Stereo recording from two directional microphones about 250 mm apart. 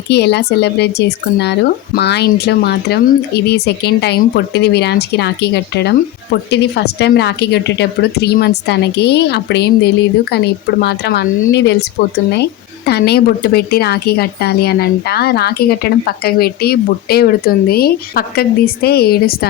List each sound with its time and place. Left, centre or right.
0.1 s speech: left